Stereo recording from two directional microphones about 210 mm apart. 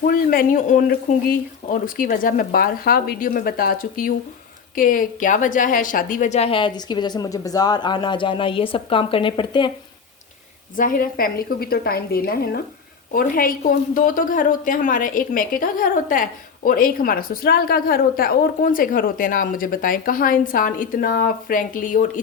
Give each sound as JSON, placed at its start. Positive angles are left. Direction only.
{"t": 0.0, "sound": "a woman's voice", "side_deg": 45}
{"t": 10.8, "sound": "speech", "side_deg": 40}